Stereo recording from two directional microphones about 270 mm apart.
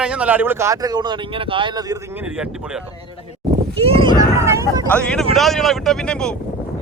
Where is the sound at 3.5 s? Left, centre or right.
Right.